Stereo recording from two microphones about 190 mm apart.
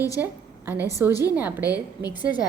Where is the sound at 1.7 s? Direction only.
20° left (ahead or behind).